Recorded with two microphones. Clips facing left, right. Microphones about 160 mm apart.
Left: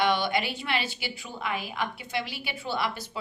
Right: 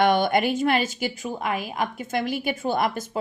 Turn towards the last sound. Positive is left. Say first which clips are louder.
# right 7 dB
turn(degrees=-45)  # may be behind; listen again after turning